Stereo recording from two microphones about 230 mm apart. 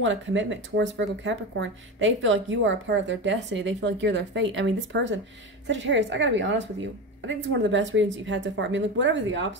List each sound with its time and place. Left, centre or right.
0.0 s speech: right